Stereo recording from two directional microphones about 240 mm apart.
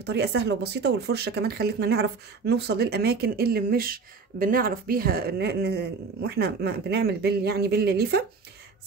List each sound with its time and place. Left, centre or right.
0.0 s speech: right